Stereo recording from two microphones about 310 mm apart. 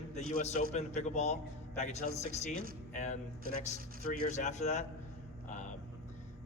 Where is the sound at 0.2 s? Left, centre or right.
Left.